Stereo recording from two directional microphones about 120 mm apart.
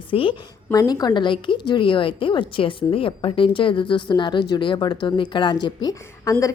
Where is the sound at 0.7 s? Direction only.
30° left (ahead or behind).